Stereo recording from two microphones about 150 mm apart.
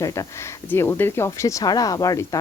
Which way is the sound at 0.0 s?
20° left (ahead or behind).